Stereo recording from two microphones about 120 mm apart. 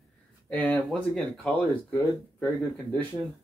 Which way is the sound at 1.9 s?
15° left (ahead or behind).